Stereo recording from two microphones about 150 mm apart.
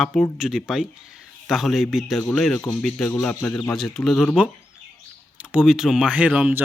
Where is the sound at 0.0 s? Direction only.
5° left (ahead or behind).